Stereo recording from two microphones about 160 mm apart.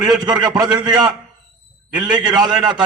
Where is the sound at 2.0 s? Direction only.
25° right (ahead or behind).